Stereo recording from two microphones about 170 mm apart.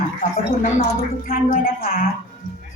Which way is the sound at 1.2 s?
55° left (ahead or behind).